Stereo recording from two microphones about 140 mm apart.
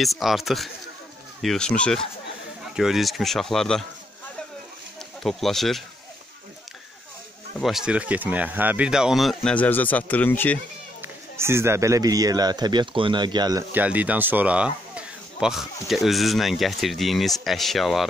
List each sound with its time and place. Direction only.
0.0 s speech: centre (ahead or behind)
5.2 s speech: centre (ahead or behind)
7.5 s speech: centre (ahead or behind)
11.0 s a man's voice: 20° right (ahead or behind)
13.7 s speech: 10° right (ahead or behind)